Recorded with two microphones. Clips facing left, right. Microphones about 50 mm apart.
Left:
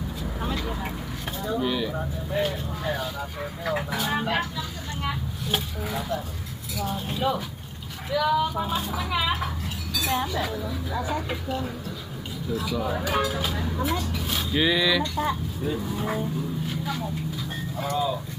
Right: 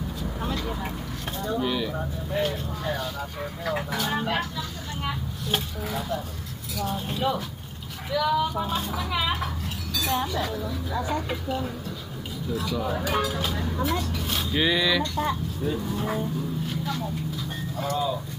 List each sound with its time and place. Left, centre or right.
0.2 s vehicle: centre
1.4 s speech: centre